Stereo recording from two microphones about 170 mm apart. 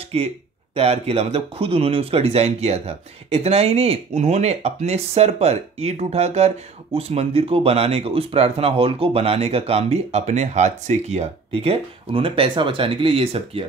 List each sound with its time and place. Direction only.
0.1 s speech: 35° right (ahead or behind)